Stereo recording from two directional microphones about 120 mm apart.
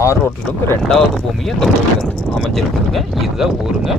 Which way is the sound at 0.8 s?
Centre (ahead or behind).